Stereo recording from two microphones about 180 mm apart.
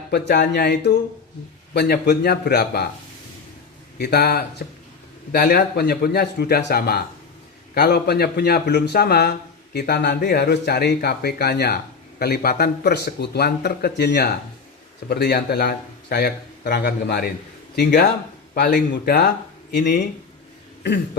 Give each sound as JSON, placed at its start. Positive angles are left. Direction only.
{"t": 0.1, "sound": "speech", "side_deg": 65}
{"t": 3.9, "sound": "speech", "side_deg": 60}